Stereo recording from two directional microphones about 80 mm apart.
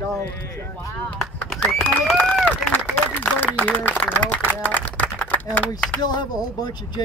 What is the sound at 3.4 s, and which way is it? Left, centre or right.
A man's voice, left.